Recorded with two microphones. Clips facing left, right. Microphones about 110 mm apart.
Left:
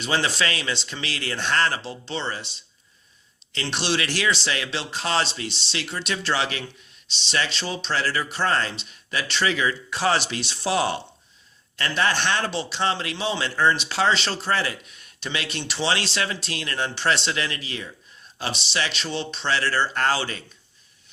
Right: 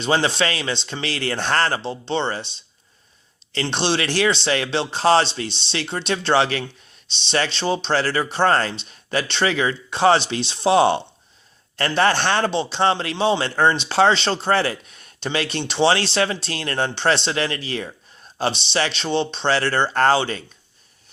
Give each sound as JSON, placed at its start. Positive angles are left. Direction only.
{"t": 0.0, "sound": "a man's voice", "side_deg": -30}
{"t": 3.5, "sound": "a man's voice", "side_deg": -30}